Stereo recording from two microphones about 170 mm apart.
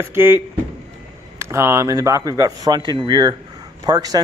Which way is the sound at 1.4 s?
15° right (ahead or behind).